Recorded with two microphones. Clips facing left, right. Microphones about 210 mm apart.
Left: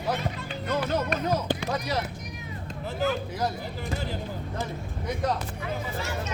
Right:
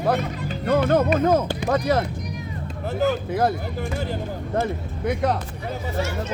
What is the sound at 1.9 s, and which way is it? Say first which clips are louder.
Speech: right 8 dB; 50° right (ahead or behind).